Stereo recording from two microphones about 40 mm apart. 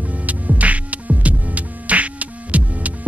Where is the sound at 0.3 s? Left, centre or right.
Right.